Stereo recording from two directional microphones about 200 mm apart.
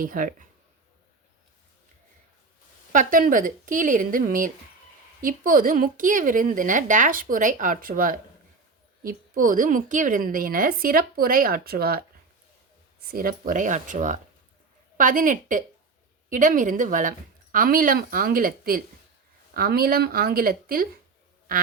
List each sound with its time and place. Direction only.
0.0 s a woman's voice: 45° right (ahead or behind)
2.9 s a woman's voice: 40° right (ahead or behind)